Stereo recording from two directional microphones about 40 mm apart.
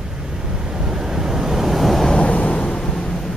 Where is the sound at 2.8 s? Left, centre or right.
Centre.